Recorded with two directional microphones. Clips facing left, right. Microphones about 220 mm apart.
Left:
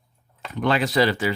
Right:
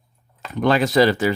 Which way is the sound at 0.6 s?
45° right (ahead or behind).